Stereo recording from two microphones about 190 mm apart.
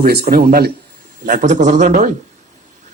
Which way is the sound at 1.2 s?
40° right (ahead or behind).